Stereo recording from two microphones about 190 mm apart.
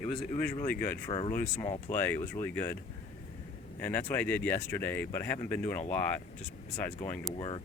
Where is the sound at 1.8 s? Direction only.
10° left (ahead or behind).